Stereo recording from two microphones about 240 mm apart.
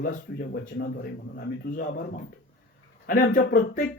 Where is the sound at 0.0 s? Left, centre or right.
Left.